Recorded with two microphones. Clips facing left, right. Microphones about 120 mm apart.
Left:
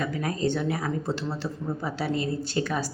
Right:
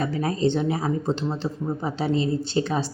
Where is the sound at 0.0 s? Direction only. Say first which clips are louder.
Right 4 dB; 30° right (ahead or behind).